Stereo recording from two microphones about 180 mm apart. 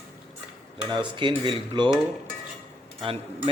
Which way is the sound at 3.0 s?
30° right (ahead or behind).